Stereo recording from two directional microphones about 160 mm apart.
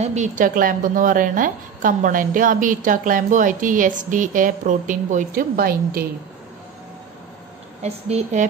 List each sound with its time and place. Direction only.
0.0 s a woman's voice: 45° right (ahead or behind); by 6.0 s 65° right (ahead or behind)
7.8 s a woman's voice: 45° right (ahead or behind)